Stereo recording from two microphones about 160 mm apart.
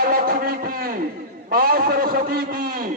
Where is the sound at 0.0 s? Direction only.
65° right (ahead or behind).